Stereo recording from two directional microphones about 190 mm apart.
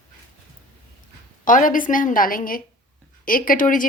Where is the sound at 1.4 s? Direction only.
45° left (ahead or behind).